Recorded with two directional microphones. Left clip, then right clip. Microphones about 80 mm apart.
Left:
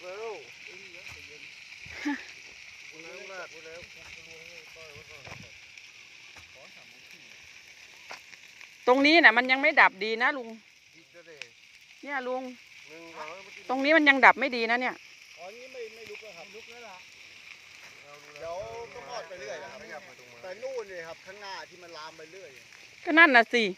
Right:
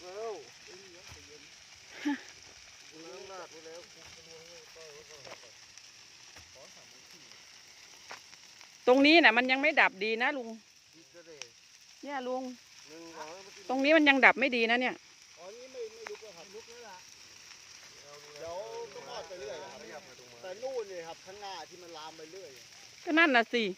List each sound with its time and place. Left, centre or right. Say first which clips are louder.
0.0 s a sound: left 2 dB; right
1.9 s a sound: left 2 dB; right
8.8 s speech: left 3 dB; right
9.7 s speech: left 5 dB; centre
10.1 s speech: left 4 dB; right
12.0 s speech: left 4 dB; centre
13.7 s speech: left 3 dB; right
14.4 s speech: left 1 dB; right
16.1 s a sound: left 3 dB; right
19.4 s speech: left 3 dB; left
20.7 s speech: left 1 dB; centre
21.4 s speech: left 2 dB; centre
21.9 s speech: left 2 dB; centre